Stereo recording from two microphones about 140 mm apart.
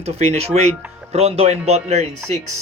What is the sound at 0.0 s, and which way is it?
Speech, 50° right (ahead or behind).